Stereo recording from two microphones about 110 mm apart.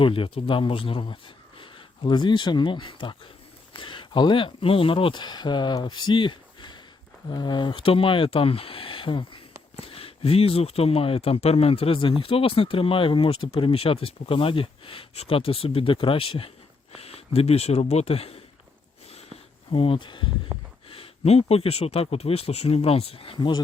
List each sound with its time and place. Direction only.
0.0 s speech: 55° left (ahead or behind)
9.8 s speech: 60° left (ahead or behind)
19.7 s speech: 55° left (ahead or behind)
20.9 s speech: 65° left (ahead or behind); by 23.6 s 45° left (ahead or behind)